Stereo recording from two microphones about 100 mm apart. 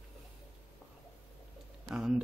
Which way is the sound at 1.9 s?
5° right (ahead or behind).